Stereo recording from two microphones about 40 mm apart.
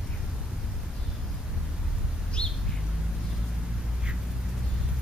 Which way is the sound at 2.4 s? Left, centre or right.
Left.